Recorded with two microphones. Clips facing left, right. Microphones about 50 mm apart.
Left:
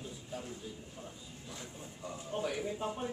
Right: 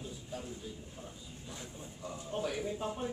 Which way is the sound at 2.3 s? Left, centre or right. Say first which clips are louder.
Even; centre.